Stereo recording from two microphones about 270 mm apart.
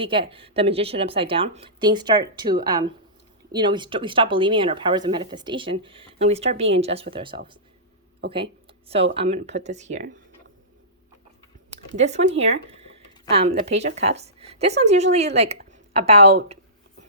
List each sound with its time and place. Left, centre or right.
0.0 s a woman's voice: centre
9.1 s a woman's voice: right
11.9 s a woman's voice: right